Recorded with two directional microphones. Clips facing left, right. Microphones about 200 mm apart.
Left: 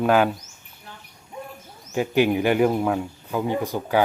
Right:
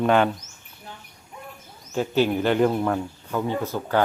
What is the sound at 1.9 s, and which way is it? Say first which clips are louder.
Speech: left 2 dB; 15° left (ahead or behind).